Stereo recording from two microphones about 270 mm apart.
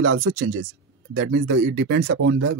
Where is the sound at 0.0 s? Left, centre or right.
Right.